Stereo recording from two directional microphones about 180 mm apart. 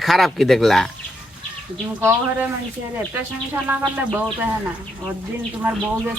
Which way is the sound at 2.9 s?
10° right (ahead or behind).